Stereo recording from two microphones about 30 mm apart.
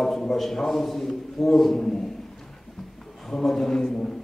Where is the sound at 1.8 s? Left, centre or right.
Centre.